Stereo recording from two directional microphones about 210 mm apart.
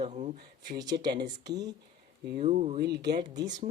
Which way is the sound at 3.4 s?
35° right (ahead or behind).